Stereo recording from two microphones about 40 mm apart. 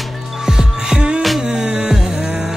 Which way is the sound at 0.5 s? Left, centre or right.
Centre.